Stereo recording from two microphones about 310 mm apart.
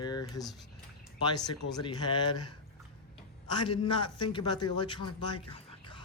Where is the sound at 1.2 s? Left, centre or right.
Centre.